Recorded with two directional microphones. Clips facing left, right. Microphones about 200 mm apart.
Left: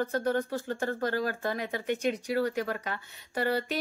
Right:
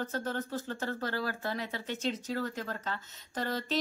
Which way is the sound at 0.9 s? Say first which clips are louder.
Left 5 dB; 50° left (ahead or behind).